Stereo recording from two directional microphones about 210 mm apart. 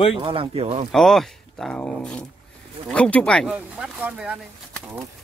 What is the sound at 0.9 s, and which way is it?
Speech, centre (ahead or behind).